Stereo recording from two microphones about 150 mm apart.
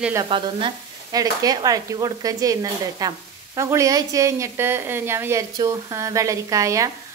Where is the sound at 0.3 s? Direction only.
35° right (ahead or behind).